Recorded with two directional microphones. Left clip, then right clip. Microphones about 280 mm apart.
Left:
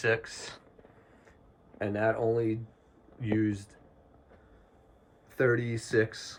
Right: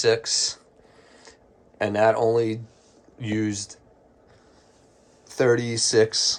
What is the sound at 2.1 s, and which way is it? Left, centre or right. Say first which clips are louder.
Speech: right 5 dB; right.